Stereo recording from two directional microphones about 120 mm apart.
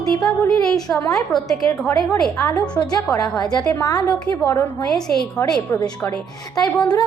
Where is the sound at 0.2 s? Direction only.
Centre (ahead or behind).